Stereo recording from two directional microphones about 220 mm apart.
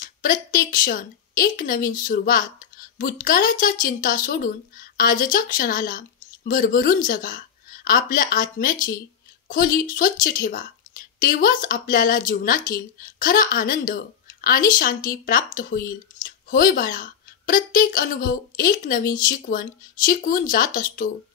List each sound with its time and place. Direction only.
0.0 s a woman's voice: 40° left (ahead or behind)